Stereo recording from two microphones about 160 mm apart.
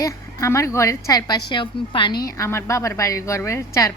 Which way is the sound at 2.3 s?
20° left (ahead or behind).